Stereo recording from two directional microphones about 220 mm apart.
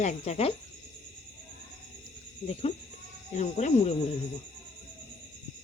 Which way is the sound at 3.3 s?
30° left (ahead or behind).